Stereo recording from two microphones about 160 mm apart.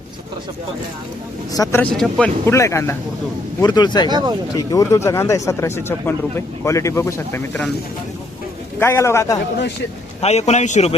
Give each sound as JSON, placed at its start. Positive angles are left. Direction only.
{"t": 1.5, "sound": "speech", "side_deg": 20}
{"t": 1.8, "sound": "speech", "side_deg": 5}
{"t": 2.5, "sound": "speech", "side_deg": 20}
{"t": 4.1, "sound": "speech", "side_deg": -25}
{"t": 4.5, "sound": "speech", "side_deg": 20}
{"t": 8.8, "sound": "speech", "side_deg": 15}
{"t": 10.2, "sound": "speech", "side_deg": 40}